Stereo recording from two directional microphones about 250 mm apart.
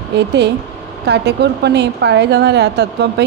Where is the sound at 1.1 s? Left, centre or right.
Right.